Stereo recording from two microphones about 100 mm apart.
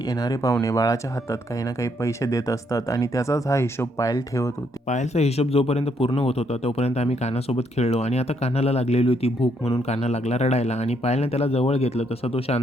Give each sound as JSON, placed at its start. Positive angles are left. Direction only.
{"t": 0.2, "sound": "speech", "side_deg": 35}
{"t": 5.1, "sound": "speech", "side_deg": 90}
{"t": 9.9, "sound": "speech", "side_deg": 90}